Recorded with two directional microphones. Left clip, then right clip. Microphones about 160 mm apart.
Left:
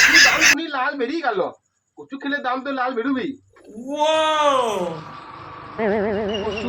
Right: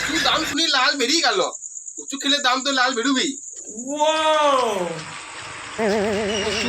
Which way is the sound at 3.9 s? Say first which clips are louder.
Even; centre (ahead or behind).